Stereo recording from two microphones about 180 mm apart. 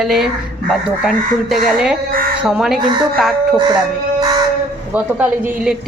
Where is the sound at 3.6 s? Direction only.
25° right (ahead or behind).